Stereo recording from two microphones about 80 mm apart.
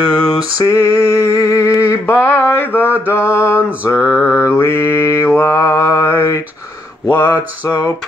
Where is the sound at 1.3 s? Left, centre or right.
Left.